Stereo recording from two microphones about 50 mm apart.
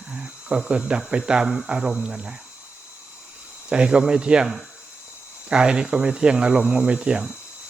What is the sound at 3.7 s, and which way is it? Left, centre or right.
Speech, centre.